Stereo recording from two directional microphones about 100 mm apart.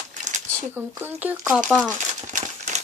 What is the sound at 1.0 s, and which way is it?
Speech, 20° right (ahead or behind).